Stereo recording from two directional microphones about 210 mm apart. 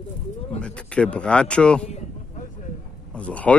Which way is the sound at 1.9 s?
30° left (ahead or behind).